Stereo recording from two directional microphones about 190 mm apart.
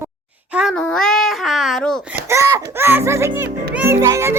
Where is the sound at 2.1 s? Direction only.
15° right (ahead or behind).